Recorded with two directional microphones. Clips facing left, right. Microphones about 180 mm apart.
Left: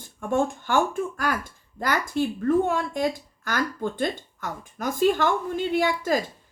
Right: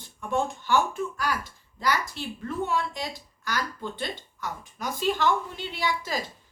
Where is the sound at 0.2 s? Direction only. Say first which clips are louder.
Left 4 dB; 50° left (ahead or behind).